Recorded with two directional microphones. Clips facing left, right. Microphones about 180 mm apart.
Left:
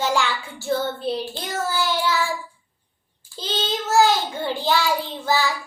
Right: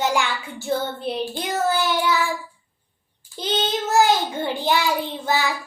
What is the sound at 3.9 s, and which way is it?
Child singing, 20° right (ahead or behind).